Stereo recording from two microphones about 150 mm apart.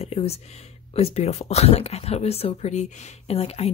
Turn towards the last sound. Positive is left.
turn(degrees=40)  # may be behind; listen again after turning